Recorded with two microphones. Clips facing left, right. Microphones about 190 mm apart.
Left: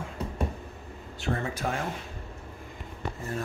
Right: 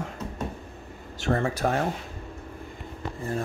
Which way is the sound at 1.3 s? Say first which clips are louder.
Right 6 dB; 45° right (ahead or behind).